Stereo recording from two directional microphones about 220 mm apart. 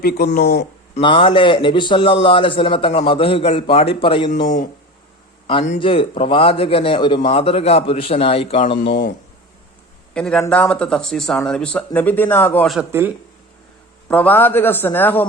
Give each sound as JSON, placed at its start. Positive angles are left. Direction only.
{"t": 0.0, "sound": "speech", "side_deg": 45}
{"t": 0.9, "sound": "a man's voice", "side_deg": 20}
{"t": 8.8, "sound": "speech", "side_deg": 55}
{"t": 10.2, "sound": "a man's voice", "side_deg": 5}
{"t": 12.9, "sound": "speech", "side_deg": -10}
{"t": 14.1, "sound": "a man's voice", "side_deg": 5}